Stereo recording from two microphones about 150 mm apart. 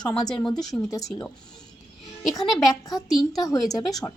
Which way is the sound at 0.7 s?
10° left (ahead or behind).